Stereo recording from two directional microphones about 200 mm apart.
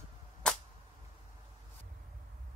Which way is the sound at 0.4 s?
5° left (ahead or behind).